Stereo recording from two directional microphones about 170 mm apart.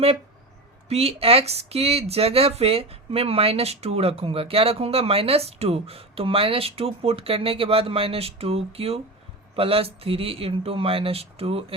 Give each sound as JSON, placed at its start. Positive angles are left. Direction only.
{"t": 0.9, "sound": "speech", "side_deg": -35}